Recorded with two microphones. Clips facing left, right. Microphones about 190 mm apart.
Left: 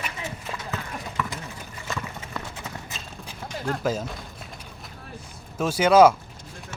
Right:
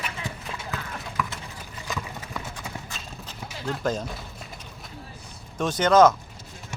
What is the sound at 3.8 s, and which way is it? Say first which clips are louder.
Speech: even; 5° left (ahead or behind).